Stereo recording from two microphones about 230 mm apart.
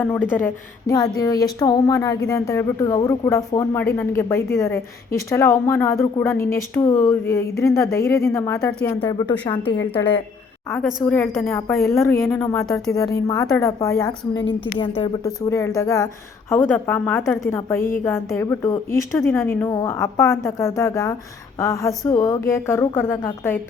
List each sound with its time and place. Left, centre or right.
0.0 s a woman's voice: centre